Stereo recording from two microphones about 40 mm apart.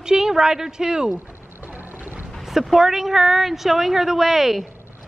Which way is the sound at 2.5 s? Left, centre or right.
Centre.